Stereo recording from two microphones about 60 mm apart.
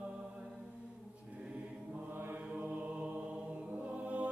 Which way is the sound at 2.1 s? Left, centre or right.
Right.